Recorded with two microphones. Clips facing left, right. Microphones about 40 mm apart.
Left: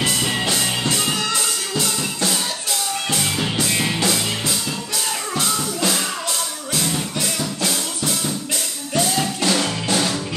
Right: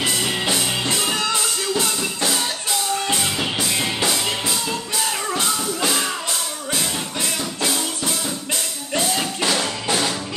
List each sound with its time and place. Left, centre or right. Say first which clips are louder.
0.0 s music: left 1 dB; centre
9.8 s music: right 1 dB; centre